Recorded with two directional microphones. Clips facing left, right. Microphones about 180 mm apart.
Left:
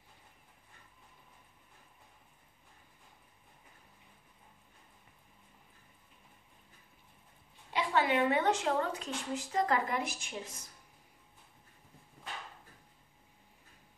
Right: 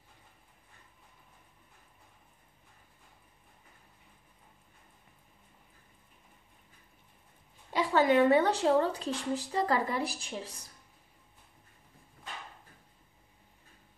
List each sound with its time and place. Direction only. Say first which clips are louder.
7.7 s a woman's voice: right 5 dB; 40° right (ahead or behind)